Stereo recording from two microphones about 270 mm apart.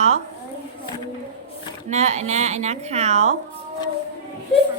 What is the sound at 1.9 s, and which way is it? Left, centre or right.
A woman's voice, right.